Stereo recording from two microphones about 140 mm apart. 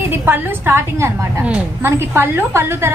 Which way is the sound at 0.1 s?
15° right (ahead or behind).